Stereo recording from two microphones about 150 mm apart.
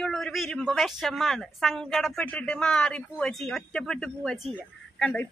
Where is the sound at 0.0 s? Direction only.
Centre (ahead or behind).